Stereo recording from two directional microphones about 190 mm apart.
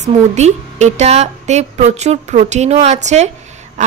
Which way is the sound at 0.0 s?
40° right (ahead or behind).